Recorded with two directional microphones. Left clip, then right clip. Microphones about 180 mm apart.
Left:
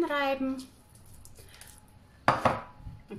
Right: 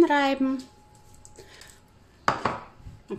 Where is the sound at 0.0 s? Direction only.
35° right (ahead or behind).